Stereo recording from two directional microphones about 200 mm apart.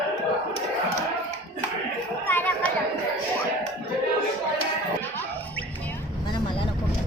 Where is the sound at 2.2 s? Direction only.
10° left (ahead or behind).